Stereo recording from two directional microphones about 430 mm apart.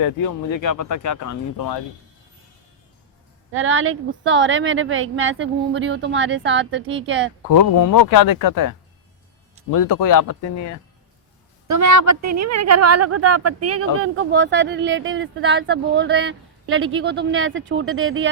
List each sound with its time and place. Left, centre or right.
0.6 s speech: left
3.5 s speech: right
7.5 s speech: left
11.7 s speech: right